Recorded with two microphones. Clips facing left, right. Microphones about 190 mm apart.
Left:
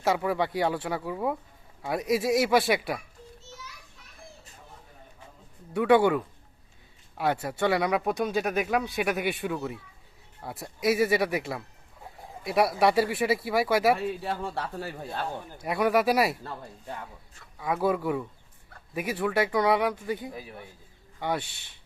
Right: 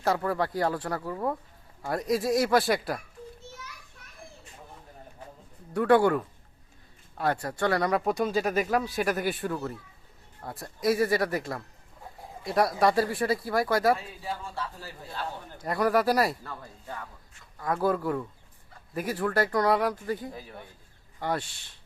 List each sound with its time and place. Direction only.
0.0 s speech: 5° left (ahead or behind)
5.7 s speech: centre (ahead or behind)
7.4 s speech: 5° left (ahead or behind)
13.9 s speech: 65° left (ahead or behind)
15.6 s speech: centre (ahead or behind)
16.4 s speech: 25° left (ahead or behind)
17.6 s speech: centre (ahead or behind)